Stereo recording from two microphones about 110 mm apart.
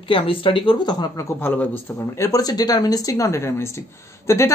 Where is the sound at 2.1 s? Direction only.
30° left (ahead or behind).